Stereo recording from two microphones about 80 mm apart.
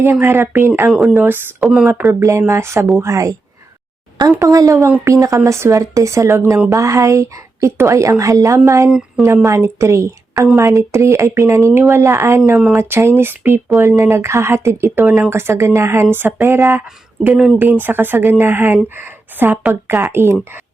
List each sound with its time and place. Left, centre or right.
0.0 s speech: right
0.9 s speech: centre
1.2 s speech: right
1.6 s speech: centre
2.0 s speech: right
4.4 s speech: right
8.9 s speech: centre
9.2 s speech: right
13.7 s speech: right